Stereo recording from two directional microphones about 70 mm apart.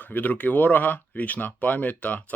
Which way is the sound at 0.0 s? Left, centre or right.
Left.